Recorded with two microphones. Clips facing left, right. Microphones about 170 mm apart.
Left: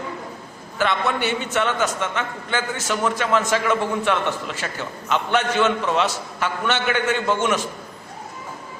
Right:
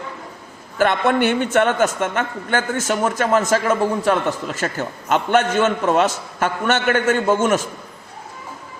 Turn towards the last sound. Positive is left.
turn(degrees=-45)  # may be behind; listen again after turning